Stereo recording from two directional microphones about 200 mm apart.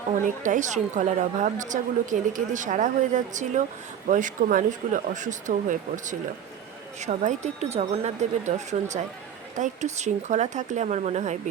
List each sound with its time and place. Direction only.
0.3 s a woman's voice: 40° right (ahead or behind)